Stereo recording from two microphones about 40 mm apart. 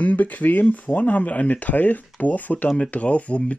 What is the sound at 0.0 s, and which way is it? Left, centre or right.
Speech, left.